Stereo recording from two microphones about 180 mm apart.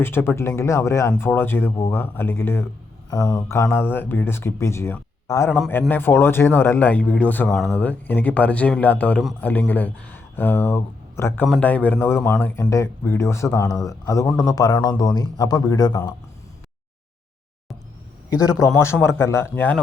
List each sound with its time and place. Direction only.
0.0 s speech: 10° left (ahead or behind)
18.6 s speech: 15° left (ahead or behind)